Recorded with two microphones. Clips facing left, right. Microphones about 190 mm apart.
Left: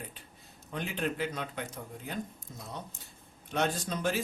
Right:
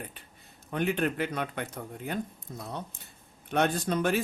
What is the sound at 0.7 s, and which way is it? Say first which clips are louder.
A man's voice: right 6 dB; 60° right (ahead or behind).